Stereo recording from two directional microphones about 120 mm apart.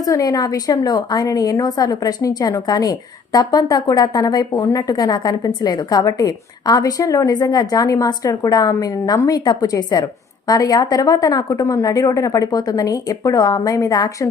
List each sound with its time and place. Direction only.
0.0 s a woman's voice: 30° left (ahead or behind)